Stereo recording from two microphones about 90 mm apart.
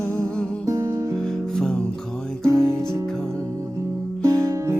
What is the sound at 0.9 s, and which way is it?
Music, 30° right (ahead or behind).